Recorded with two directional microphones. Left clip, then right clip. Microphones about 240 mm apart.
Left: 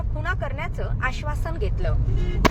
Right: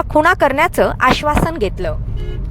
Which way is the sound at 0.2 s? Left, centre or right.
Right.